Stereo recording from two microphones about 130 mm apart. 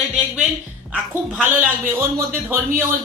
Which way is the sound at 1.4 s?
15° right (ahead or behind).